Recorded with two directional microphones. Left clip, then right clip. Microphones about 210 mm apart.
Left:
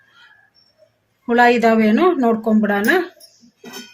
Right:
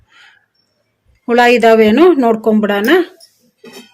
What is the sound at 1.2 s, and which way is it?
Speech, 45° right (ahead or behind).